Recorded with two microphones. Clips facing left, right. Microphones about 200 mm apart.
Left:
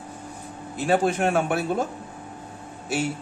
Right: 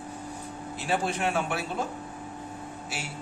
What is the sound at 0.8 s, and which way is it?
Speech, 50° left (ahead or behind).